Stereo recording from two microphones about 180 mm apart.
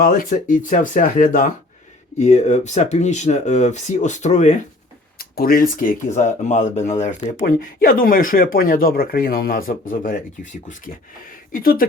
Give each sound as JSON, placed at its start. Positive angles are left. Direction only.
{"t": 0.0, "sound": "speech", "side_deg": 50}
{"t": 5.4, "sound": "speech", "side_deg": 55}
{"t": 11.5, "sound": "speech", "side_deg": 55}